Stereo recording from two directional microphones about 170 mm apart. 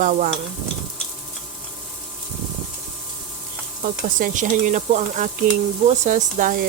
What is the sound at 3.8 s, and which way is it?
Speech, 50° right (ahead or behind).